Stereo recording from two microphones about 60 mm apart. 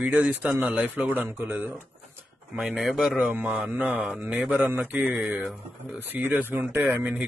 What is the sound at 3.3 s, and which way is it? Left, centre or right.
Speech, right.